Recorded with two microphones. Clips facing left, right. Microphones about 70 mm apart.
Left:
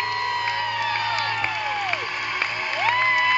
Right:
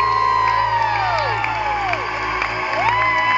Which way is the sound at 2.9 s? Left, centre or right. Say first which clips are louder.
Right 2 dB; centre.